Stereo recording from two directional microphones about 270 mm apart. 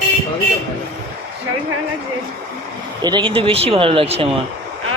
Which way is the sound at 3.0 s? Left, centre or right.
Centre.